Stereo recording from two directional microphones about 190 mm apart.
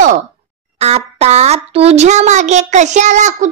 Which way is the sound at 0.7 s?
35° right (ahead or behind).